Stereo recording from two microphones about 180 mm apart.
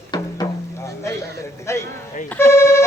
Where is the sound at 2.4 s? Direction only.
15° left (ahead or behind).